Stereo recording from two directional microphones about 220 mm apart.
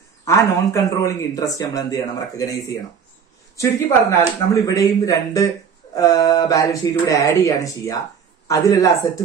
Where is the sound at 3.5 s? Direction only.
15° left (ahead or behind).